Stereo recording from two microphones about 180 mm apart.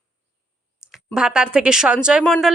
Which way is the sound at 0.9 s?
5° right (ahead or behind).